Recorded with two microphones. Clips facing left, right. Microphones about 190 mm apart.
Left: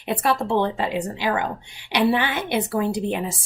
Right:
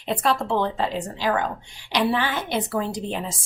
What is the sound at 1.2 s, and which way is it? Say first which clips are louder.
Speech: right 4 dB; 10° left (ahead or behind).